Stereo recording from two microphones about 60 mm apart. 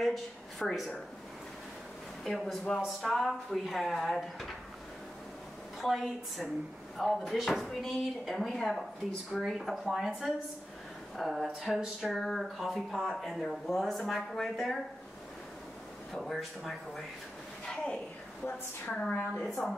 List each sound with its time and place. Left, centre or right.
0.0 s a woman's voice: centre
2.2 s speech: centre
5.8 s speech: centre
16.1 s speech: centre
18.4 s a woman's voice: left
19.3 s speech: centre